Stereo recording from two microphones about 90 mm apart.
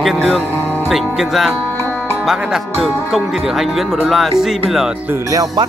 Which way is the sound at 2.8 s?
5° right (ahead or behind).